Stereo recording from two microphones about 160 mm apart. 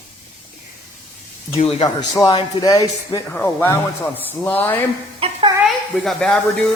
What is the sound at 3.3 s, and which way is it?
A man's voice, 15° left (ahead or behind).